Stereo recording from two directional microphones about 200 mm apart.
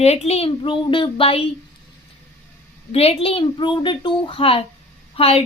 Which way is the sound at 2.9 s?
30° left (ahead or behind).